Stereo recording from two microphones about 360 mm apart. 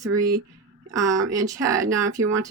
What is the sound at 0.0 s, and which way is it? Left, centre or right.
Speech, centre.